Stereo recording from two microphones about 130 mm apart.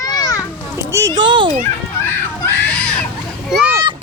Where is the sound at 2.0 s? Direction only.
15° left (ahead or behind).